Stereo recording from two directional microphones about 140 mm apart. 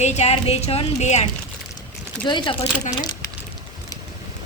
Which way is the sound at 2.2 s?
35° left (ahead or behind).